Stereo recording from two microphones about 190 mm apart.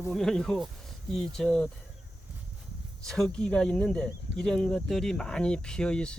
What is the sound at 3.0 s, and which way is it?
Speech, centre (ahead or behind).